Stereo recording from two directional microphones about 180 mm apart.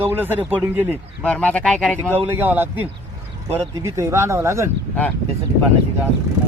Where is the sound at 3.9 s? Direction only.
15° right (ahead or behind).